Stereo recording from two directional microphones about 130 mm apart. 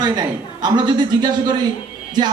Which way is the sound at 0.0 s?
35° right (ahead or behind).